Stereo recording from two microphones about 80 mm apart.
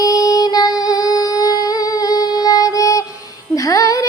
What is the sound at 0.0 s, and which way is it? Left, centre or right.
Music, left.